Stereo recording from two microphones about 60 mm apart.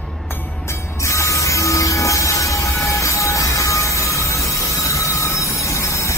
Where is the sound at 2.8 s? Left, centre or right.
Left.